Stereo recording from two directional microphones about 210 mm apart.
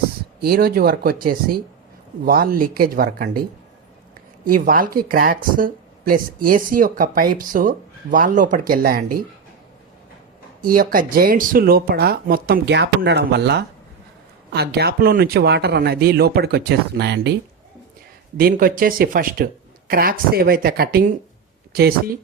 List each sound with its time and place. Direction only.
0.3 s speech: 45° right (ahead or behind)
4.4 s speech: 40° right (ahead or behind)
10.6 s speech: 40° right (ahead or behind)
18.3 s speech: 45° right (ahead or behind)